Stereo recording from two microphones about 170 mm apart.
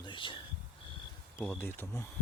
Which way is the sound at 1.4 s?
15° left (ahead or behind).